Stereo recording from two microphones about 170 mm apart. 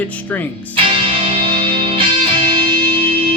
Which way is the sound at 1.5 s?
30° right (ahead or behind).